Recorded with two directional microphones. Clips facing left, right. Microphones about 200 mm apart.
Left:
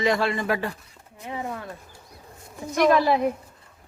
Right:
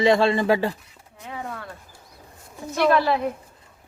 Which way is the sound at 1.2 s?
20° left (ahead or behind).